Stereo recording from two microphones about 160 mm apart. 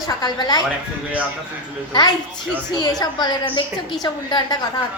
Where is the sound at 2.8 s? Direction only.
25° left (ahead or behind).